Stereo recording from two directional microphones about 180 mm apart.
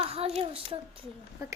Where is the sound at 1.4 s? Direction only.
20° right (ahead or behind).